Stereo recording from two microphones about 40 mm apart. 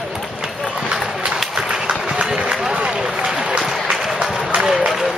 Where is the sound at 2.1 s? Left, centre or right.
Right.